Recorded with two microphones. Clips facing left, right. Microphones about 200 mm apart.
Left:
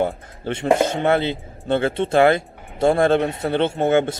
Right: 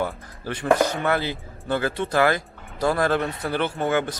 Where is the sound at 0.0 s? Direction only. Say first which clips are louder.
Left 5 dB; 25° left (ahead or behind).